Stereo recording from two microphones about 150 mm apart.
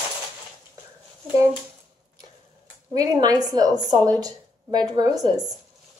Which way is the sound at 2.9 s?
25° right (ahead or behind).